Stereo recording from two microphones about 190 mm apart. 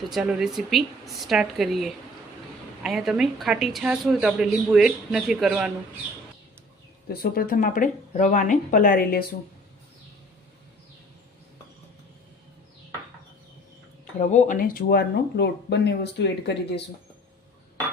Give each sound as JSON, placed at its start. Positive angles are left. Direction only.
{"t": 0.1, "sound": "speech", "side_deg": -5}
{"t": 7.1, "sound": "speech", "side_deg": 55}
{"t": 14.2, "sound": "speech", "side_deg": 40}